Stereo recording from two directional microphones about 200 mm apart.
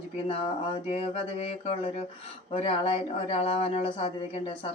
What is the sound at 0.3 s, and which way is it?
Speech, 30° left (ahead or behind).